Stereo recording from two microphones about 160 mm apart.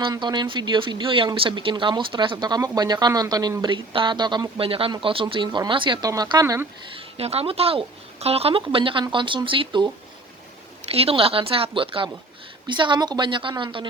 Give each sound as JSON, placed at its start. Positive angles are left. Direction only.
{"t": 0.0, "sound": "speech", "side_deg": -30}
{"t": 6.9, "sound": "speech", "side_deg": -40}
{"t": 10.9, "sound": "speech", "side_deg": -35}